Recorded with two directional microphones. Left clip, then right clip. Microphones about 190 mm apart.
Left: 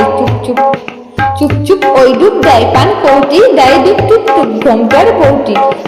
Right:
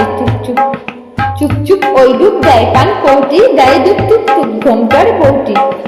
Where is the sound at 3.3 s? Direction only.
30° left (ahead or behind).